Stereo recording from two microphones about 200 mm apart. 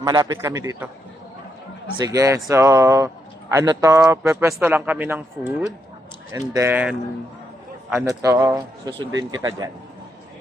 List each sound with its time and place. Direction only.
0.0 s a man's voice: 20° right (ahead or behind)
2.0 s a man's voice: 15° right (ahead or behind)